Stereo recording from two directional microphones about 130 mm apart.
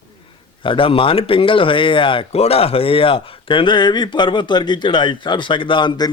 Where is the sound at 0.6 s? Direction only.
40° left (ahead or behind).